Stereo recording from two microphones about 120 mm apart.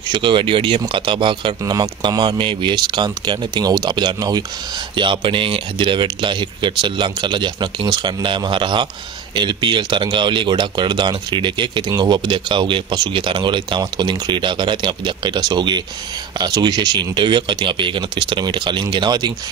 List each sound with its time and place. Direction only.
0.1 s speech: 40° right (ahead or behind)